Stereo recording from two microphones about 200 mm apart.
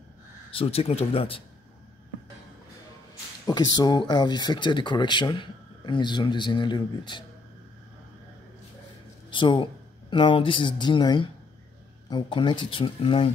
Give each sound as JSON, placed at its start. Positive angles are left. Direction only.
{"t": 0.5, "sound": "speech", "side_deg": 30}
{"t": 3.4, "sound": "speech", "side_deg": 20}
{"t": 9.3, "sound": "speech", "side_deg": 25}